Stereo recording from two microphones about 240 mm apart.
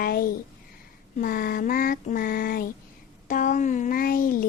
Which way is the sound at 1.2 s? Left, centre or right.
Left.